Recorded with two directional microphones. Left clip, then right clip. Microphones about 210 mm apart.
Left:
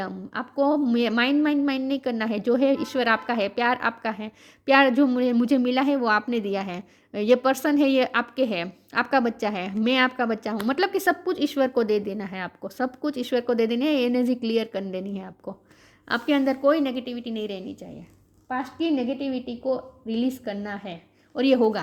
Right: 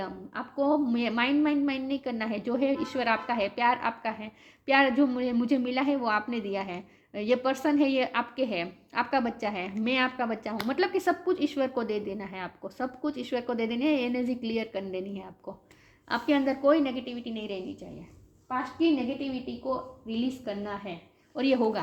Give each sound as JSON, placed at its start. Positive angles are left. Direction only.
{"t": 0.0, "sound": "a woman's voice", "side_deg": 55}